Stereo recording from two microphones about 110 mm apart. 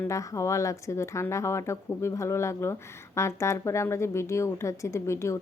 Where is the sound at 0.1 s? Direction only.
30° left (ahead or behind).